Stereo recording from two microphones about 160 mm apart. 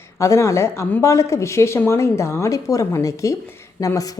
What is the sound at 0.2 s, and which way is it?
A woman's voice, 20° left (ahead or behind).